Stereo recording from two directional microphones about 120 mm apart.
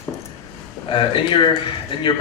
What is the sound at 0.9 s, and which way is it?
Speech, 45° left (ahead or behind).